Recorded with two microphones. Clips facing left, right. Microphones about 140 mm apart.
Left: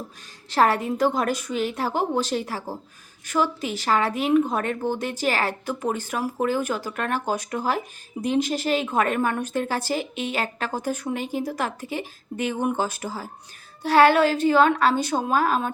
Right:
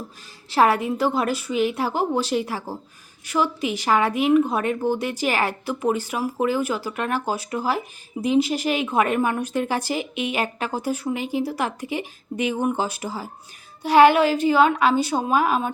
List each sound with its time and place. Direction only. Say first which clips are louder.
0.5 s speech: right 2 dB; 10° right (ahead or behind)